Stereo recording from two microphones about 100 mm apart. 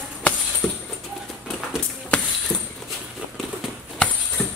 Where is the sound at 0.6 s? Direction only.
5° left (ahead or behind).